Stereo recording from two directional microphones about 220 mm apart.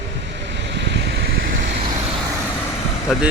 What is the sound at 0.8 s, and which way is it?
Vehicle, 50° right (ahead or behind).